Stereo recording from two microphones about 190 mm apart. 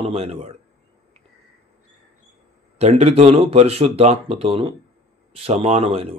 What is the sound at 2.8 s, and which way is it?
Speech, 35° right (ahead or behind).